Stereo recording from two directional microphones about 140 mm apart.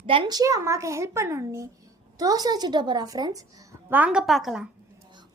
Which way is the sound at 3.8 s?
10° right (ahead or behind).